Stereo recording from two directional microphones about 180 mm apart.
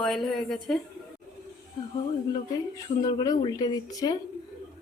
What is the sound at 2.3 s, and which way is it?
Speech, 20° left (ahead or behind).